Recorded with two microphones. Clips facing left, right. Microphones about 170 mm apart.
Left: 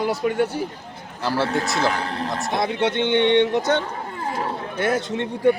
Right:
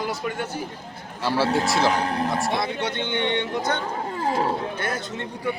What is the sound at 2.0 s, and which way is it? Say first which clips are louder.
Speech: right 2 dB; 40° right (ahead or behind).